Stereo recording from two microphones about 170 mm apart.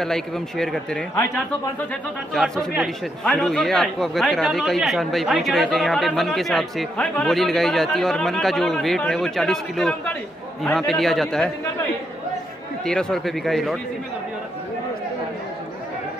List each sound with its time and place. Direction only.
0.0 s speech: 5° left (ahead or behind)